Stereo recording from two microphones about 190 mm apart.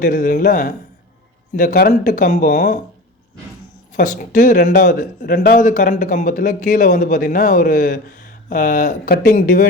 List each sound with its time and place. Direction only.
0.0 s speech: 50° left (ahead or behind)
3.9 s speech: 45° left (ahead or behind)